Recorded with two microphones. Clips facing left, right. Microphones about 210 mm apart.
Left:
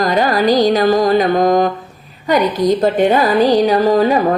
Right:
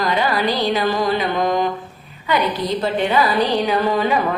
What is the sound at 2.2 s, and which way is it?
Speech, 45° left (ahead or behind).